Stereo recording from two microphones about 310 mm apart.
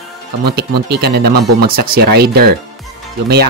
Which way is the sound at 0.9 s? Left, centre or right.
Right.